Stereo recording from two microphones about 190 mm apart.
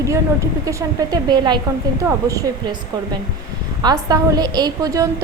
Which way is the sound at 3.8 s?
20° right (ahead or behind).